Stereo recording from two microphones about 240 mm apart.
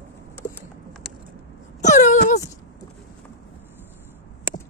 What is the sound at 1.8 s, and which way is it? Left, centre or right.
Wail, left.